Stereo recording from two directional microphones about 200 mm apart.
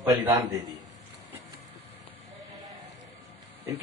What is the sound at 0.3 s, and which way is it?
Speech, 15° right (ahead or behind).